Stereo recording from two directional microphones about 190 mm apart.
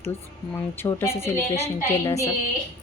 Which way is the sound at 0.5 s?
10° left (ahead or behind).